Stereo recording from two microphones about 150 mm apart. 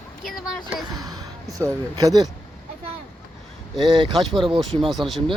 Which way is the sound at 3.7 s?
30° right (ahead or behind).